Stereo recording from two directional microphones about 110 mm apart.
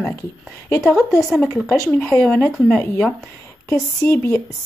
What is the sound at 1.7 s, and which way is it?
Speech, 25° left (ahead or behind).